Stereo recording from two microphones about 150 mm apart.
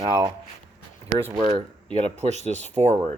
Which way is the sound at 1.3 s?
45° right (ahead or behind).